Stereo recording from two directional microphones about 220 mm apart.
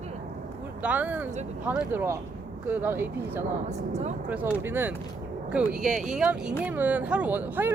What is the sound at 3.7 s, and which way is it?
Speech, 30° right (ahead or behind).